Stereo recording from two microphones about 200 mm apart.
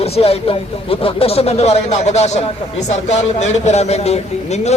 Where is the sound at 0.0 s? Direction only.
30° left (ahead or behind).